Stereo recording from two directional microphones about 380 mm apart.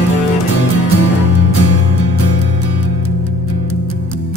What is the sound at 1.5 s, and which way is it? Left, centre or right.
Music, left.